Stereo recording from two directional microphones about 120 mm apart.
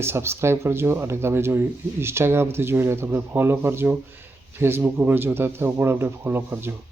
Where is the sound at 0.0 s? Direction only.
20° right (ahead or behind).